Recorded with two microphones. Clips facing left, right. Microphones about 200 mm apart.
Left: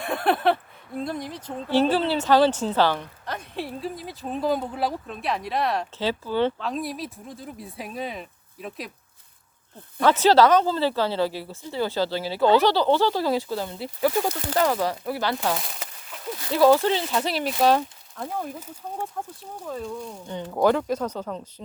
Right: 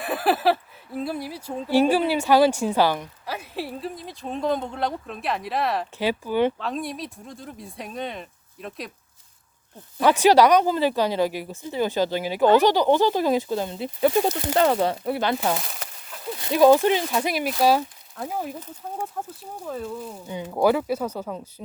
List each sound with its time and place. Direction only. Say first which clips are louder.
0.0 s speech: right 1 dB; 5° right (ahead or behind)
6.0 s speech: right 2 dB; 15° right (ahead or behind)
6.6 s speech: even; centre (ahead or behind)
10.1 s speech: right 1 dB; 15° right (ahead or behind)
15.5 s a sound: right 1 dB; centre (ahead or behind)
16.4 s speech: right 2 dB; 15° right (ahead or behind)